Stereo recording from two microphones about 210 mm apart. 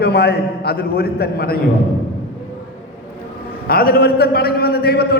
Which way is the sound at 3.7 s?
45° left (ahead or behind).